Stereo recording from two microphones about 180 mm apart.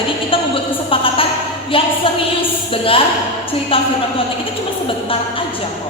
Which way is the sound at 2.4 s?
30° left (ahead or behind).